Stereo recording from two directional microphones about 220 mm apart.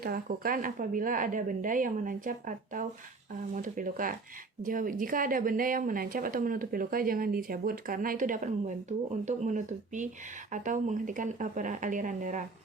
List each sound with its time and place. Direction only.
0.0 s a woman's voice: 40° right (ahead or behind)